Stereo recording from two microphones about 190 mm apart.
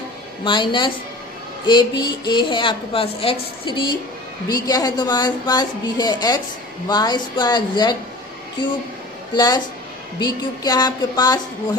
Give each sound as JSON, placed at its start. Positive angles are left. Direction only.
{"t": 0.4, "sound": "a woman's voice", "side_deg": 25}
{"t": 9.3, "sound": "a woman's voice", "side_deg": 20}